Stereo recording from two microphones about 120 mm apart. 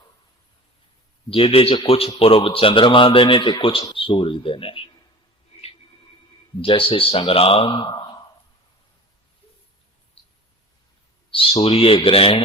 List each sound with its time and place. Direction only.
1.3 s speech: 50° left (ahead or behind)
6.6 s speech: 50° left (ahead or behind)
11.3 s speech: 50° left (ahead or behind)